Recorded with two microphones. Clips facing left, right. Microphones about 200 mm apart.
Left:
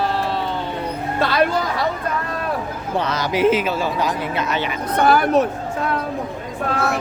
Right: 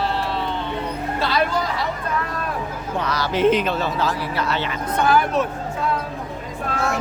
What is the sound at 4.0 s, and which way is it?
Speech, 15° left (ahead or behind).